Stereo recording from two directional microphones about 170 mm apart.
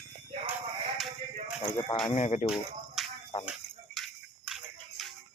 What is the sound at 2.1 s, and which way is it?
Speech, 40° left (ahead or behind).